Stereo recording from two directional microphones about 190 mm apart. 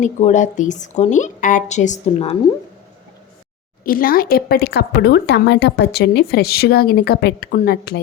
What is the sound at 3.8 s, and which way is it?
A woman's voice, 50° left (ahead or behind).